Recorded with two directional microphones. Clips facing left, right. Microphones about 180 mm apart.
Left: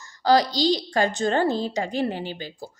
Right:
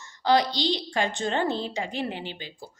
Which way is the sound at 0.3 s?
40° left (ahead or behind).